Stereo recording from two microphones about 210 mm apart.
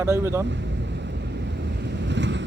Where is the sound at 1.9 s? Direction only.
55° right (ahead or behind).